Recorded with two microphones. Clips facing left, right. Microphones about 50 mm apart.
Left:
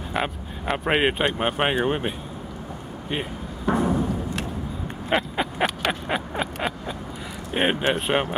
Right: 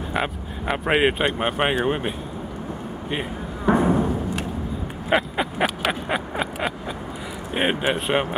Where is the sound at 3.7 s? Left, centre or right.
Right.